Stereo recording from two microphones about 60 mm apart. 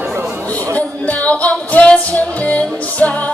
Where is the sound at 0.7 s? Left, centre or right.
Left.